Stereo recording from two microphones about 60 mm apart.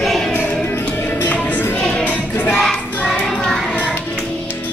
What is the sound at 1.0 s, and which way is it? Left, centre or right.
Music, left.